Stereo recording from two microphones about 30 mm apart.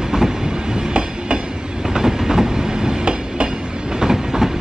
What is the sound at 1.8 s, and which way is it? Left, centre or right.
Train, centre.